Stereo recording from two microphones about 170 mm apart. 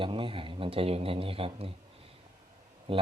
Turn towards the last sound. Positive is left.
turn(degrees=-30)  # may be behind; listen again after turning